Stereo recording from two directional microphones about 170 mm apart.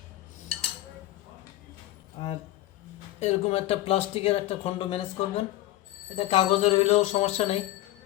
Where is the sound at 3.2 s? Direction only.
40° left (ahead or behind).